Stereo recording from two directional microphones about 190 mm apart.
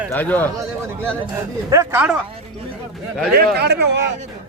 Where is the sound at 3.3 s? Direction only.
60° right (ahead or behind).